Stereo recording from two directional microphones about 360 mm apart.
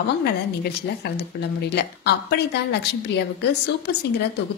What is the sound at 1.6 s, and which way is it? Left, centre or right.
A woman's voice, left.